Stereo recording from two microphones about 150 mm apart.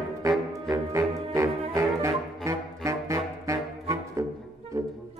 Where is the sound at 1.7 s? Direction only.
20° right (ahead or behind).